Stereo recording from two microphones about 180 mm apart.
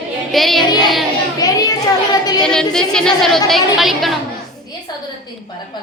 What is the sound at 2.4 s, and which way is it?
A woman's voice, 5° left (ahead or behind).